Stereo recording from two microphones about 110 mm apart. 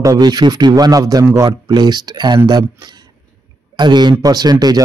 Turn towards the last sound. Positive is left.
turn(degrees=-35)  # may be behind; listen again after turning